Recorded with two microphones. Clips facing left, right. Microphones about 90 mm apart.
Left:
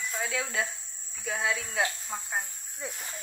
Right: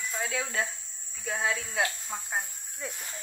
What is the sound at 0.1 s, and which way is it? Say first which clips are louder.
Speech: right 1 dB; centre (ahead or behind).